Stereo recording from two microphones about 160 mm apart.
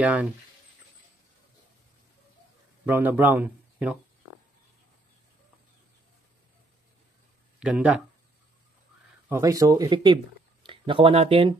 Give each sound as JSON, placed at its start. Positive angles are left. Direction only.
{"t": 0.0, "sound": "speech", "side_deg": -10}
{"t": 2.8, "sound": "speech", "side_deg": -10}
{"t": 7.6, "sound": "speech", "side_deg": -5}
{"t": 9.3, "sound": "speech", "side_deg": -20}